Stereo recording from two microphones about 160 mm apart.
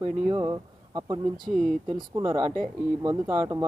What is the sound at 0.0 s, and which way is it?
Speech, 30° right (ahead or behind).